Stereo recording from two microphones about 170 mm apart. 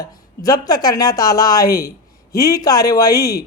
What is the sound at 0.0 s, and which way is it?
A man's voice, 20° left (ahead or behind).